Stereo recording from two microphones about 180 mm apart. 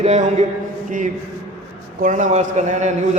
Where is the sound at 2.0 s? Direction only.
45° right (ahead or behind).